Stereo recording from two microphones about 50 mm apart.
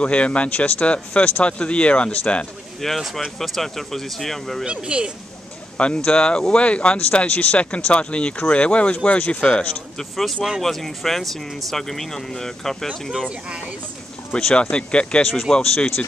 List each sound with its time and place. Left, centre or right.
0.0 s speech: left
2.8 s speech: centre
4.6 s speech: centre
5.9 s speech: centre
9.9 s speech: centre
14.4 s speech: left